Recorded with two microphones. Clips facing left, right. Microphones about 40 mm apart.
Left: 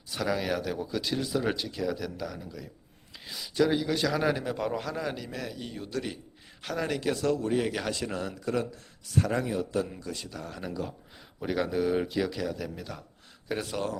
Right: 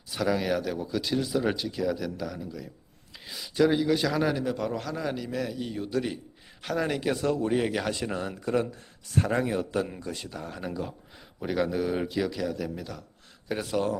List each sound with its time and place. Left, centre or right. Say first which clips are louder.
0.1 s a man's voice: right 3 dB; centre
9.1 s a man's voice: right 1 dB; right
9.4 s speech: right 2 dB; right
10.0 s a man's voice: right 2 dB; right
10.3 s speech: right 1 dB; centre
11.3 s a man's voice: right 1 dB; centre